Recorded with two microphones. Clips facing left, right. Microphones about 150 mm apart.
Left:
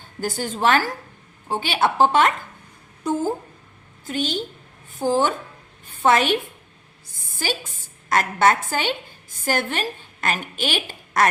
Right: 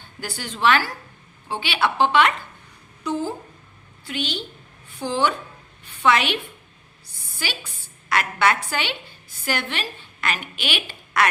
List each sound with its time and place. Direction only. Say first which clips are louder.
0.2 s a woman's voice: left 2 dB; 45° left (ahead or behind)